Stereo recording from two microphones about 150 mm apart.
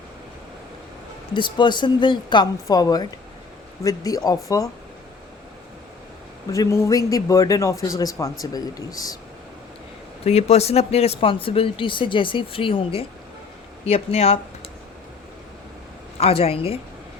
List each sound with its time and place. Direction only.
1.3 s speech: 30° left (ahead or behind)
6.5 s speech: 20° left (ahead or behind)
10.2 s speech: 45° left (ahead or behind)
16.1 s speech: 40° left (ahead or behind)